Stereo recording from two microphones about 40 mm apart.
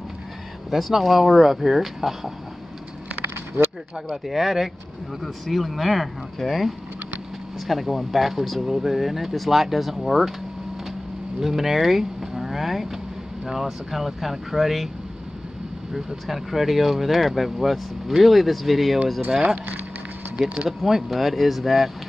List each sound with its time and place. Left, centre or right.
0.7 s speech: centre
4.1 s speech: centre
11.3 s speech: centre
15.9 s speech: centre
19.4 s speech: right
20.4 s speech: centre